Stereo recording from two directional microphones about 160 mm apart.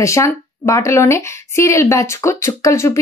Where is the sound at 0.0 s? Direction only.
20° left (ahead or behind).